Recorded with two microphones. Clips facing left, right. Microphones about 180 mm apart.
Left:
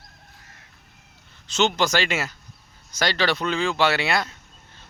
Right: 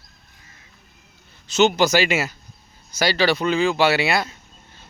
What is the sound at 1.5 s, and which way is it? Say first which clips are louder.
Speech: right 5 dB; 10° right (ahead or behind).